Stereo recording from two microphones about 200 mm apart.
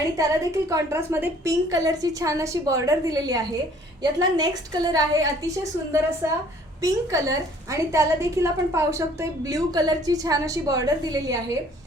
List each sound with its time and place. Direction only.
0.2 s a woman's voice: 15° right (ahead or behind)